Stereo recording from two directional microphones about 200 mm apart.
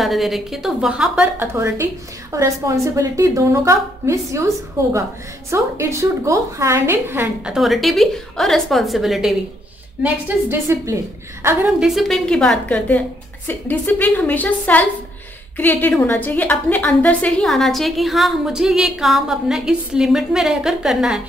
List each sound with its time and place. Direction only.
0.0 s a woman's voice: centre (ahead or behind)